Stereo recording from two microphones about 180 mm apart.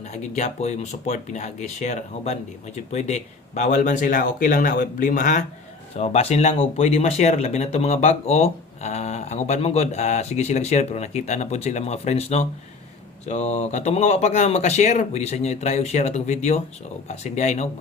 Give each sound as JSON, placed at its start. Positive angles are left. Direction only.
{"t": 0.1, "sound": "speech", "side_deg": 40}